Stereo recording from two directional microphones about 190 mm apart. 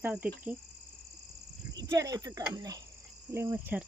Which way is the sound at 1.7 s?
15° right (ahead or behind).